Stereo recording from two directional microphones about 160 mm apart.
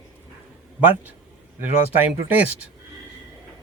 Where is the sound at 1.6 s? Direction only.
10° right (ahead or behind).